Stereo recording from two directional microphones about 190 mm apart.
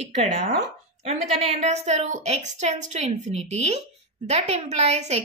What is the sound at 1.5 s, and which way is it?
A woman's voice, 35° right (ahead or behind).